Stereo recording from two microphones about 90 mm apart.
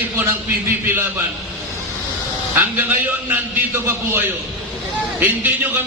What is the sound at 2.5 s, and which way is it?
Speech, 20° right (ahead or behind).